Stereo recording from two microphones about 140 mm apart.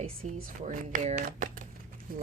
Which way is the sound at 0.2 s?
55° right (ahead or behind).